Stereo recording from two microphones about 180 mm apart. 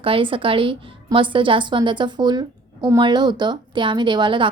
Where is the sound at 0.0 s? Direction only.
30° right (ahead or behind).